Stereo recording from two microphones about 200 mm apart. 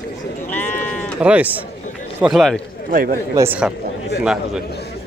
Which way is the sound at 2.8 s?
45° right (ahead or behind).